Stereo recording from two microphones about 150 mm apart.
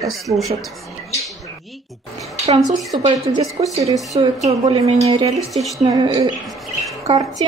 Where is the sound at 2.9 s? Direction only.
35° right (ahead or behind).